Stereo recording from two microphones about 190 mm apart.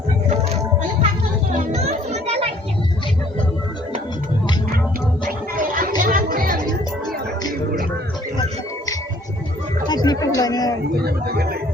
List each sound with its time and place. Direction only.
1.5 s children playing: 35° right (ahead or behind)
5.5 s music: 45° right (ahead or behind)
9.8 s a sound: 20° left (ahead or behind)
10.9 s speech: 55° right (ahead or behind)